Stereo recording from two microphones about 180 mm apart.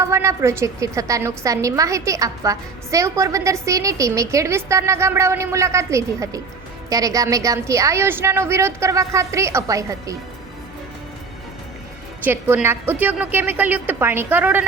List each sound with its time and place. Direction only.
0.0 s a woman's voice: 15° right (ahead or behind)
12.2 s a woman's voice: 10° right (ahead or behind)